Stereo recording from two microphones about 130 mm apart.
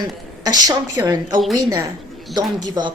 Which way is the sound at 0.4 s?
30° right (ahead or behind).